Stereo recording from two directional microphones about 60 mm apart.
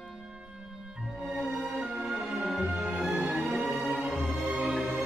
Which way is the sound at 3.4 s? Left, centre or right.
Centre.